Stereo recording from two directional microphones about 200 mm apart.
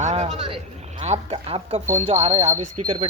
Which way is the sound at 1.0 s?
30° right (ahead or behind).